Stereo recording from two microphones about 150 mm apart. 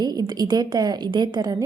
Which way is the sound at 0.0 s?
30° right (ahead or behind).